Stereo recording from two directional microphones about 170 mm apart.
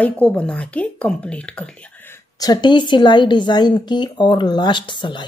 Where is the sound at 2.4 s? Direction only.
25° left (ahead or behind).